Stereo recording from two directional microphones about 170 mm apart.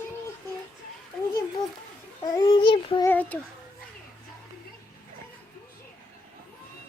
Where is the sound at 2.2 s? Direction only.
25° left (ahead or behind).